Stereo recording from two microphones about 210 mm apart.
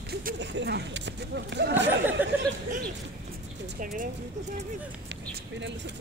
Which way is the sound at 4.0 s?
35° right (ahead or behind).